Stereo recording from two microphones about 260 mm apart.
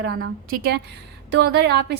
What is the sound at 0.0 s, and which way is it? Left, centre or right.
A woman's voice, right.